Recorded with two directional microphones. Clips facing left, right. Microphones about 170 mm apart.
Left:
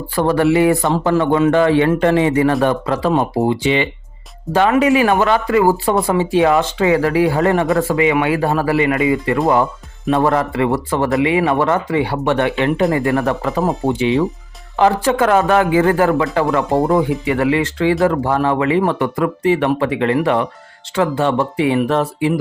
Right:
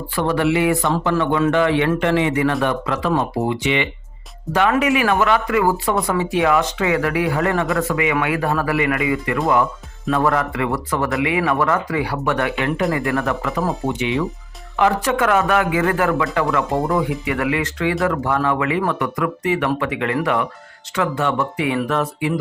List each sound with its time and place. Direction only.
0.2 s speech: 40° left (ahead or behind)